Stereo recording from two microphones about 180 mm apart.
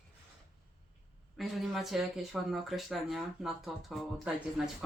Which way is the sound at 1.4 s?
Centre (ahead or behind).